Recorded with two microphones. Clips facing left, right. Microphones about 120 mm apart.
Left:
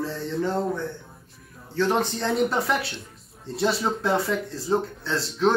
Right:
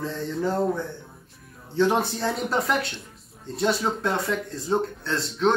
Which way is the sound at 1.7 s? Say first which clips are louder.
Right 2 dB; 15° right (ahead or behind).